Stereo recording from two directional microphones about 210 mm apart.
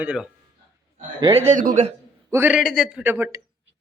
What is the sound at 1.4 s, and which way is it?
Speech, 40° right (ahead or behind).